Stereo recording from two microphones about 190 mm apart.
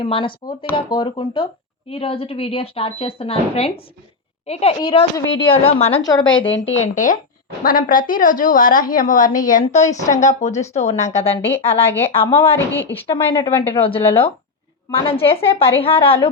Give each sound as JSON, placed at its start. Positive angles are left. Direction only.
{"t": 0.0, "sound": "a woman's voice", "side_deg": 25}
{"t": 4.8, "sound": "a woman's voice", "side_deg": 25}
{"t": 6.0, "sound": "a woman's voice", "side_deg": 20}
{"t": 6.8, "sound": "a woman's voice", "side_deg": 40}
{"t": 12.7, "sound": "speech", "side_deg": 10}
{"t": 13.1, "sound": "a woman's voice", "side_deg": 25}